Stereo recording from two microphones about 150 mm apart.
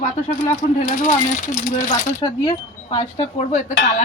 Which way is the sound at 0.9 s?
60° left (ahead or behind).